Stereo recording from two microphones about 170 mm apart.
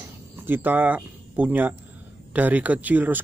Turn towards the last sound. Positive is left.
turn(degrees=-10)  # may be behind; listen again after turning